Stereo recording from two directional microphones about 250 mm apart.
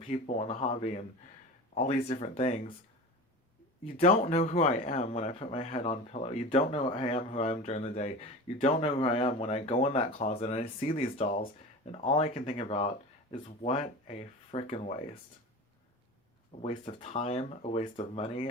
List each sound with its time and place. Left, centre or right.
0.0 s speech: left
3.8 s speech: left
16.5 s speech: left